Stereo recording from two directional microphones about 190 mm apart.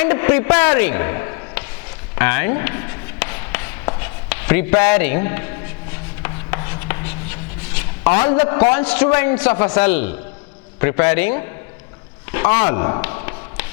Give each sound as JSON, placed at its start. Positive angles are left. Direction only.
{"t": 0.0, "sound": "a man's voice", "side_deg": 10}
{"t": 2.1, "sound": "chop", "side_deg": 15}
{"t": 8.7, "sound": "a man's voice", "side_deg": 10}
{"t": 12.7, "sound": "speech", "side_deg": 20}
{"t": 13.0, "sound": "a sound", "side_deg": 15}